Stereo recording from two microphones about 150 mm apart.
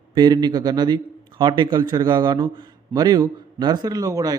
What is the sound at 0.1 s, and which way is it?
A man's voice, 30° right (ahead or behind).